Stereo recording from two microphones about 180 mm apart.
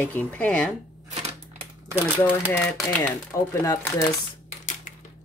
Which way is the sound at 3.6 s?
20° left (ahead or behind).